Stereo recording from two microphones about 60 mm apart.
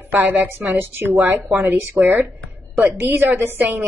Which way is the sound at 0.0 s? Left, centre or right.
Right.